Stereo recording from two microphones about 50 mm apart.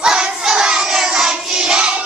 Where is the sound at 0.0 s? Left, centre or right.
Centre.